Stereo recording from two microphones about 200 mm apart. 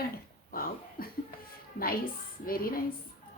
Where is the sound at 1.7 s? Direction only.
45° left (ahead or behind).